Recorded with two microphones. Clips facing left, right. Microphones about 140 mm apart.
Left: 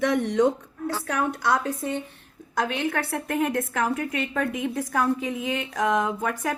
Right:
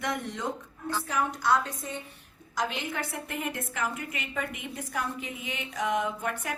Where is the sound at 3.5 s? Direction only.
90° left.